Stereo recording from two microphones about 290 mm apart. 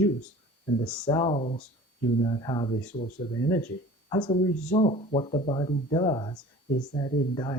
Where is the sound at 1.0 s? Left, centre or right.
Centre.